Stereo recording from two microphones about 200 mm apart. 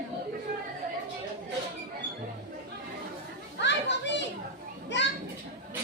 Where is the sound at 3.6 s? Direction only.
60° left (ahead or behind).